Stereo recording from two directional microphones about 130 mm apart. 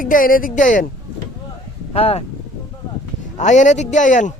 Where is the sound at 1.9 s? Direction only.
50° left (ahead or behind).